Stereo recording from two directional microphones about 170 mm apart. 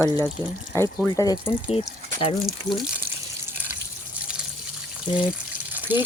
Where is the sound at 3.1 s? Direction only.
15° right (ahead or behind).